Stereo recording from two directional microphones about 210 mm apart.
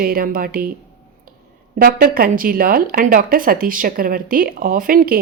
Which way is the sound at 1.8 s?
45° right (ahead or behind).